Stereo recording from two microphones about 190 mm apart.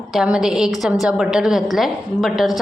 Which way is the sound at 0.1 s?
Centre (ahead or behind).